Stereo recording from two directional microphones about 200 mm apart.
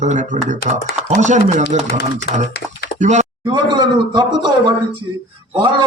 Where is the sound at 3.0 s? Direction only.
35° right (ahead or behind).